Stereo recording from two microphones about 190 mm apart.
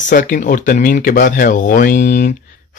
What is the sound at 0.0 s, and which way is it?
Speech, 45° left (ahead or behind).